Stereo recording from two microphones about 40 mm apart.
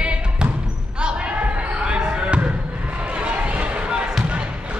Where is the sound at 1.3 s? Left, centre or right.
Right.